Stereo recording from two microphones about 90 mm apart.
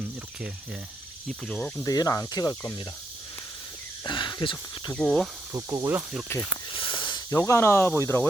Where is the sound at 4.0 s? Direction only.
60° left (ahead or behind).